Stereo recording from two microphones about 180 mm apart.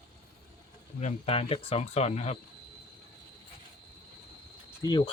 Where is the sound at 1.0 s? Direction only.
35° left (ahead or behind).